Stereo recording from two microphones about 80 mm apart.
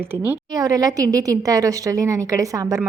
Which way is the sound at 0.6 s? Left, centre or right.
Right.